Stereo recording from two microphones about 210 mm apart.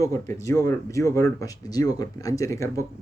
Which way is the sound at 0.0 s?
15° left (ahead or behind).